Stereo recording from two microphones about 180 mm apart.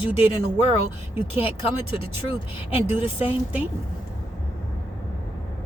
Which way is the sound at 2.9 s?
10° right (ahead or behind).